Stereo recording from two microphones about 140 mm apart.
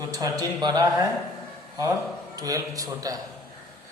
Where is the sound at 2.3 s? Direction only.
25° right (ahead or behind).